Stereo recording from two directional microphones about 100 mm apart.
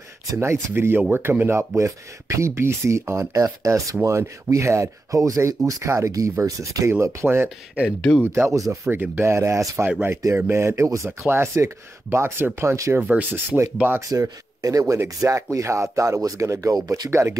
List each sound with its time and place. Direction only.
0.3 s speech: 25° right (ahead or behind)
8.0 s speech: 15° left (ahead or behind)
8.3 s speech: 30° right (ahead or behind)
8.8 s speech: 15° right (ahead or behind)
9.3 s speech: 30° right (ahead or behind)
9.8 s speech: 15° right (ahead or behind)
13.0 s speech: 15° right (ahead or behind)
14.0 s speech: 35° right (ahead or behind)
17.1 s speech: 25° right (ahead or behind)